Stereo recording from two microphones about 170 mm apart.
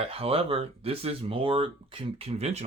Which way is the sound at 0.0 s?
35° right (ahead or behind).